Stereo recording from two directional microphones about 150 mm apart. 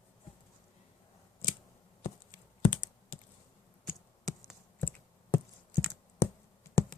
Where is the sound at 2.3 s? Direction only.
60° left (ahead or behind).